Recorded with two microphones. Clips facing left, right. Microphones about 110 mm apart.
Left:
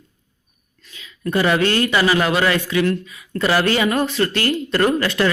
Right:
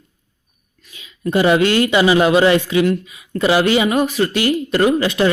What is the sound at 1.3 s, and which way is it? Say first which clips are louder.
A man's voice: right 4 dB; 20° right (ahead or behind).